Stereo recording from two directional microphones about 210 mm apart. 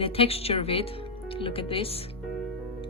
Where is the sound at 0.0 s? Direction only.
30° left (ahead or behind).